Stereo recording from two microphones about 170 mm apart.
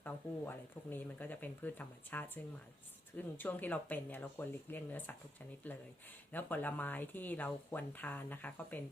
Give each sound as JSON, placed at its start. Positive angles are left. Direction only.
{"t": 0.0, "sound": "speech", "side_deg": 10}